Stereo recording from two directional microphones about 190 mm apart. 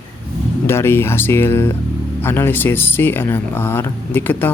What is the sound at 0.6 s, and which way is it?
Speech, 15° left (ahead or behind).